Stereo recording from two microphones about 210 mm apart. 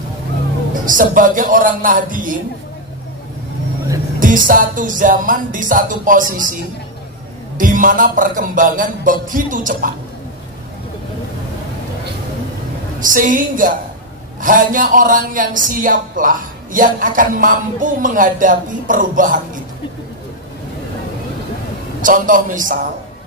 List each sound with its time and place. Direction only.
0.8 s speech: 40° right (ahead or behind)
4.2 s speech: 40° right (ahead or behind)
7.5 s speech: 40° right (ahead or behind)
13.0 s speech: 40° right (ahead or behind)
22.0 s speech: 40° right (ahead or behind)